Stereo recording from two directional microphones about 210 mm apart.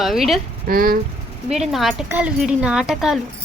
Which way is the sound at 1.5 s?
Centre (ahead or behind).